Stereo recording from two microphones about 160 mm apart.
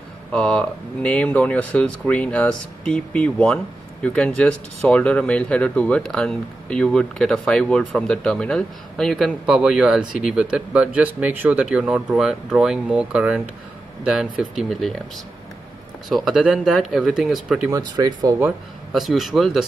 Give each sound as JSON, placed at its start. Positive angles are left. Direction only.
{"t": 0.3, "sound": "speech", "side_deg": 5}
{"t": 16.1, "sound": "speech", "side_deg": 0}
{"t": 17.6, "sound": "speech", "side_deg": -20}
{"t": 18.4, "sound": "speech", "side_deg": 0}